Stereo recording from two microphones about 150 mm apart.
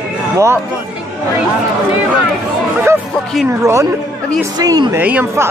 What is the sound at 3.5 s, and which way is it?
A man's voice, 20° right (ahead or behind).